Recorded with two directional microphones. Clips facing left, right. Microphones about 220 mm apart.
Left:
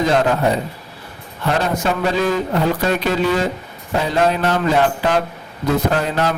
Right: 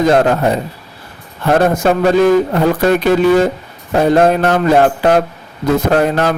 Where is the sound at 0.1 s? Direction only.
50° right (ahead or behind).